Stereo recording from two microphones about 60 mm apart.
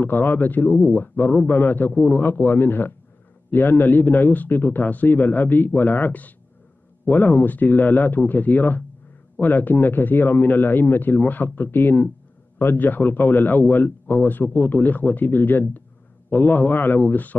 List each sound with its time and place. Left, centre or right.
0.0 s speech: left